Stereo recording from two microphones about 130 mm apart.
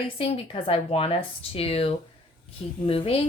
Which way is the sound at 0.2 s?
45° left (ahead or behind).